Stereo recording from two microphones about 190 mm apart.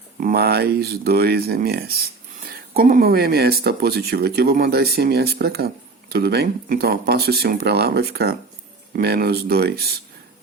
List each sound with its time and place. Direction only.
0.2 s speech: 50° right (ahead or behind)